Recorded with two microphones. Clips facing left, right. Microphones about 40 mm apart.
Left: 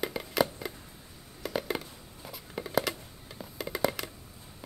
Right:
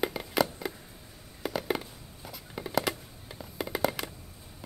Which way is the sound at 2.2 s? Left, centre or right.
Centre.